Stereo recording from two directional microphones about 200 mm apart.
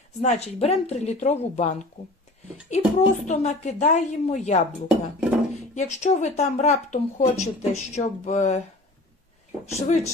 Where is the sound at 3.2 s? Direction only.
35° left (ahead or behind).